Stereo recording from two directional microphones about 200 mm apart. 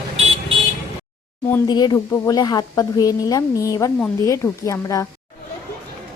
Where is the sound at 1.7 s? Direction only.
20° left (ahead or behind).